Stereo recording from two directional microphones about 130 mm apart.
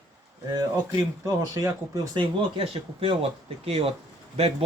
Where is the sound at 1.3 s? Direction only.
25° right (ahead or behind).